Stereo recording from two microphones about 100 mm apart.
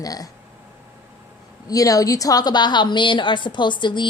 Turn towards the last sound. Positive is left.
turn(degrees=50)  # may be behind; listen again after turning